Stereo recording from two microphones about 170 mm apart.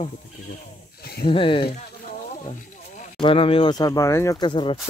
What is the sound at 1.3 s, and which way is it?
Speech, 30° left (ahead or behind).